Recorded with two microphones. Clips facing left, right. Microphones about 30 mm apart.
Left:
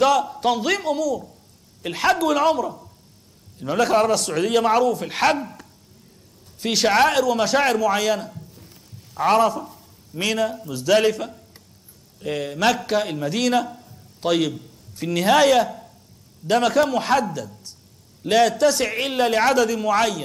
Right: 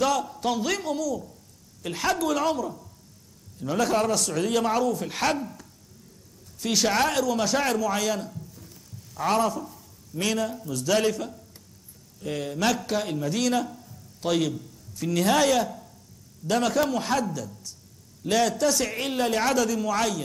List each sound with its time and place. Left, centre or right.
0.3 s a man's voice: left
1.8 s a woman's voice: left
2.2 s a man's voice: centre
3.5 s a man's voice: left
3.8 s a man's voice: centre
9.6 s a sound: left
10.2 s a man's voice: centre
12.4 s a man's voice: centre
14.5 s a man's voice: left